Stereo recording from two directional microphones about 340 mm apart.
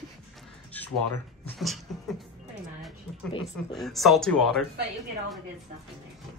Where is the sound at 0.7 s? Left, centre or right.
Centre.